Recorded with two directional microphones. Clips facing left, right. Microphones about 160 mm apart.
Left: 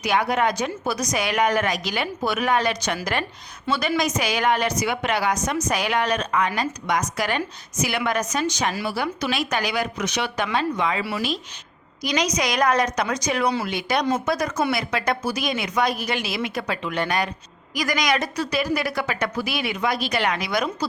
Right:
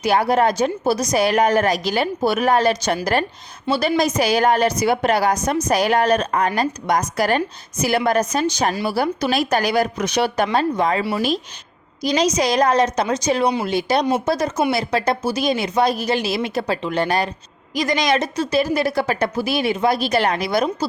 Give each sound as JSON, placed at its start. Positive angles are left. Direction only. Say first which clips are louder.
{"t": 0.0, "sound": "a woman's voice", "louder": "right 5 dB", "side_deg": -35}
{"t": 12.0, "sound": "a woman's voice", "louder": "right 5 dB", "side_deg": -30}